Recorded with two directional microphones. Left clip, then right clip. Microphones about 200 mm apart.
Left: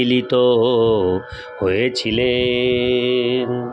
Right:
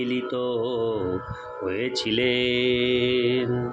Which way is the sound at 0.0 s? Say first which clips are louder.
Left 11 dB; 55° left (ahead or behind).